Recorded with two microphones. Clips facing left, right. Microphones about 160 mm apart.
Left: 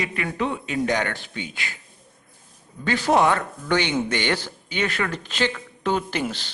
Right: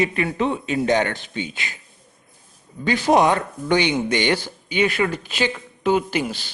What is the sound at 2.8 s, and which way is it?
A man's voice, 15° right (ahead or behind).